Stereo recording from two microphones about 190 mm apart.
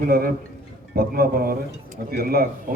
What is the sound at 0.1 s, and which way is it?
A man's voice, 55° right (ahead or behind).